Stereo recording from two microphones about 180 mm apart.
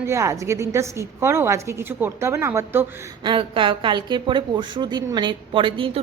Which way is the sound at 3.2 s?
25° right (ahead or behind).